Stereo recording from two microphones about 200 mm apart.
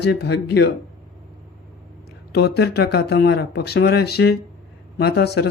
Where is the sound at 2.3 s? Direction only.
55° left (ahead or behind).